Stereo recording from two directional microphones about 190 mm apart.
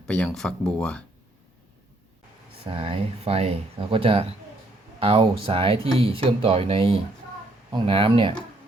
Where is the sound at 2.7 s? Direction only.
30° right (ahead or behind).